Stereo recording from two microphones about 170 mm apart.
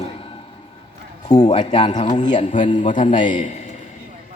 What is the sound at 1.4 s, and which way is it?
A man's voice, 45° left (ahead or behind).